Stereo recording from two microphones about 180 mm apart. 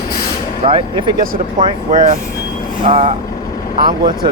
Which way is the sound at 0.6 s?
25° right (ahead or behind).